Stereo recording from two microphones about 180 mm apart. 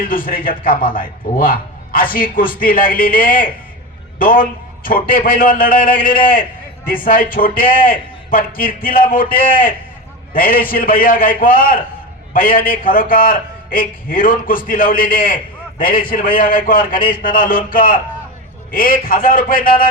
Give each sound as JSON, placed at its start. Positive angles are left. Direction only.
{"t": 0.0, "sound": "a man's voice", "side_deg": 50}